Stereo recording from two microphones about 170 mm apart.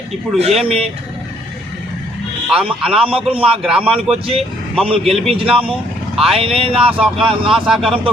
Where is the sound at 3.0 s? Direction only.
35° right (ahead or behind).